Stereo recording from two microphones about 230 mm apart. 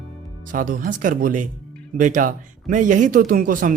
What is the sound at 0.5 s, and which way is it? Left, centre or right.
Speech, right.